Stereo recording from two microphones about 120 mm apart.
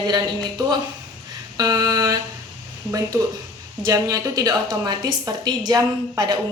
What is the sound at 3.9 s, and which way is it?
A woman's voice, 25° right (ahead or behind).